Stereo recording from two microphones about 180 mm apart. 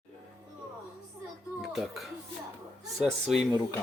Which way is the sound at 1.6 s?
Centre (ahead or behind).